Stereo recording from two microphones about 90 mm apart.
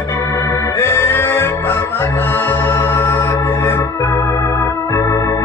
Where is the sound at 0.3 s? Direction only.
30° left (ahead or behind).